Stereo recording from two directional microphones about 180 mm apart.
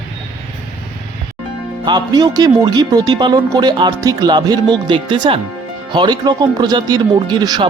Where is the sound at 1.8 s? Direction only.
25° right (ahead or behind).